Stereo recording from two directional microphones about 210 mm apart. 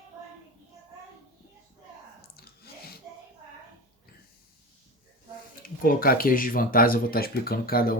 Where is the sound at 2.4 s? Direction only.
50° left (ahead or behind).